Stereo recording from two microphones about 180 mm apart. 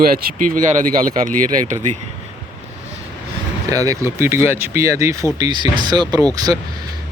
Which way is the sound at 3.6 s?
20° right (ahead or behind).